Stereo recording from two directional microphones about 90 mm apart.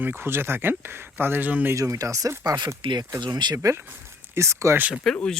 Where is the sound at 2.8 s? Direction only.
60° right (ahead or behind).